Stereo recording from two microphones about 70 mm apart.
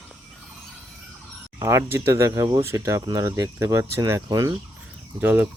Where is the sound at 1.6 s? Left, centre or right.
Right.